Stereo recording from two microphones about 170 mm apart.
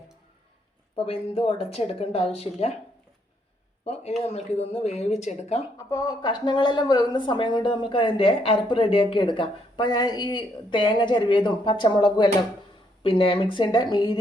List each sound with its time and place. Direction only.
0.9 s speech: 35° left (ahead or behind)
4.2 s speech: 40° left (ahead or behind)
5.9 s speech: 25° left (ahead or behind)